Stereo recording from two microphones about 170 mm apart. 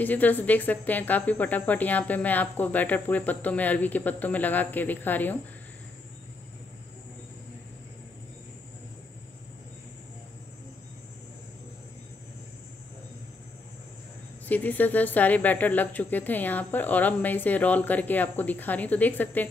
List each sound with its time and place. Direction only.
0.0 s speech: 10° left (ahead or behind)
14.4 s speech: 10° left (ahead or behind)